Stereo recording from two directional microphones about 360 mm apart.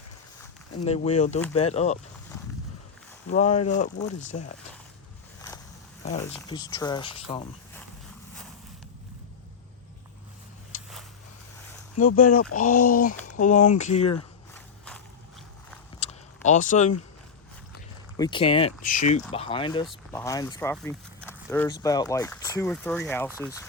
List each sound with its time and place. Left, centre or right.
0.8 s speech: centre
3.2 s speech: centre
6.3 s speech: centre
11.9 s speech: left
14.5 s mechanisms: centre
16.5 s speech: left
18.2 s speech: centre